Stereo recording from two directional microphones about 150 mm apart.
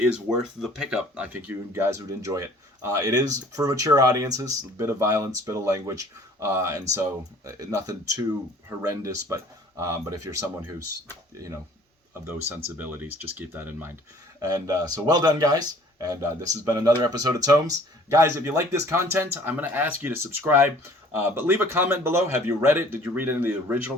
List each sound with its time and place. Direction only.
0.0 s speech: 5° right (ahead or behind); by 11.5 s 25° right (ahead or behind)
12.3 s speech: 10° right (ahead or behind)
14.4 s speech: 25° right (ahead or behind)